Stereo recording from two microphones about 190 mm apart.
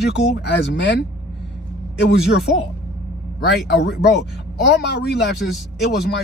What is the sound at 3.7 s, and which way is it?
Speech, 65° left (ahead or behind).